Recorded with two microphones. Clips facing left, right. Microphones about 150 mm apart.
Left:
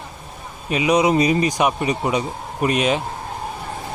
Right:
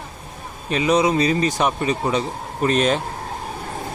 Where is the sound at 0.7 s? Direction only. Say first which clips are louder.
Left 1 dB; 10° left (ahead or behind).